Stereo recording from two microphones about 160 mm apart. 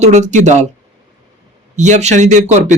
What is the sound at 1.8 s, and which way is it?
Speech, 45° right (ahead or behind).